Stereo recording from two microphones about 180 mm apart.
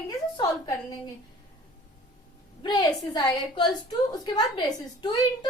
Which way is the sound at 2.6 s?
25° left (ahead or behind).